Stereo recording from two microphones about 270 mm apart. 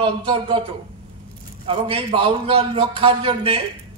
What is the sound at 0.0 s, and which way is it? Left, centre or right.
Speech, centre.